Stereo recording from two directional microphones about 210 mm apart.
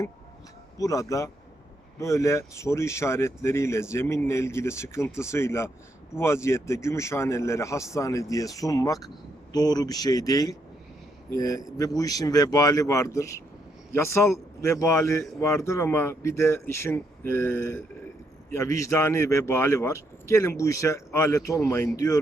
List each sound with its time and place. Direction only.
0.8 s speech: 15° left (ahead or behind)